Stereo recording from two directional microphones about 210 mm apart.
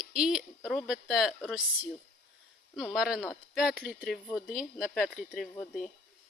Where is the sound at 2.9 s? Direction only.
5° right (ahead or behind).